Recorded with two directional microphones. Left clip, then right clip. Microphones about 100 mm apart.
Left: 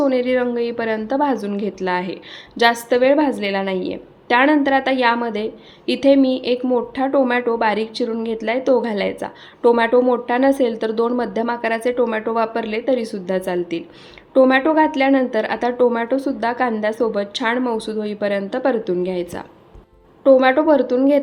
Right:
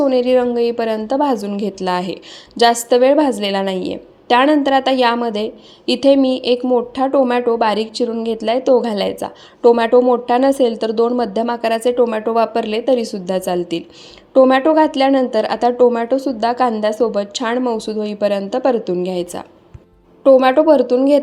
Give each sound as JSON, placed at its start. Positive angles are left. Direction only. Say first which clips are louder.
{"t": 0.0, "sound": "a woman's voice", "louder": "right 4 dB", "side_deg": -40}
{"t": 6.6, "sound": "a woman's voice", "louder": "right 3 dB", "side_deg": -30}
{"t": 14.3, "sound": "a woman's voice", "louder": "right 3 dB", "side_deg": -40}